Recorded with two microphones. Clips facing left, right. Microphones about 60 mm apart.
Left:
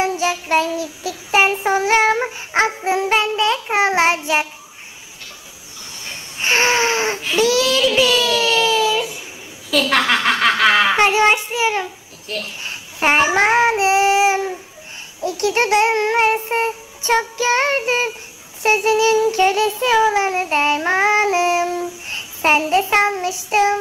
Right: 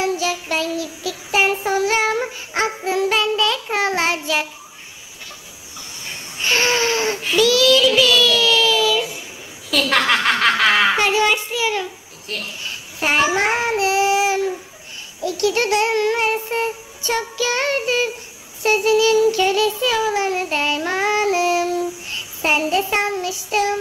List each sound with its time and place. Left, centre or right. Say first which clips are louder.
0.0 s child singing: left 2 dB; left
6.4 s baby cry: left 2 dB; left
7.3 s speech: right 2 dB; left
9.7 s a woman's voice: left 1 dB; centre
11.0 s child singing: left 3 dB; left